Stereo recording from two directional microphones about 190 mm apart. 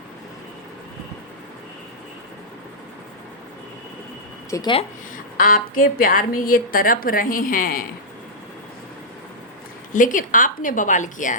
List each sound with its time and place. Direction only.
4.5 s speech: 25° left (ahead or behind)
5.1 s a woman's voice: 45° left (ahead or behind)
9.9 s a woman's voice: 45° left (ahead or behind)